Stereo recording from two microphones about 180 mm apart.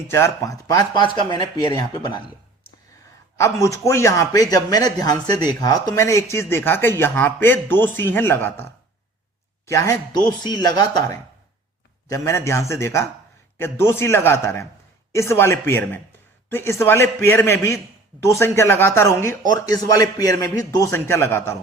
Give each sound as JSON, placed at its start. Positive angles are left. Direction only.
{"t": 0.1, "sound": "speech", "side_deg": 15}
{"t": 3.3, "sound": "speech", "side_deg": 15}